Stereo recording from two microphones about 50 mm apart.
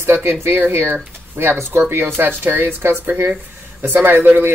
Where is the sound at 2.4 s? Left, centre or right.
Right.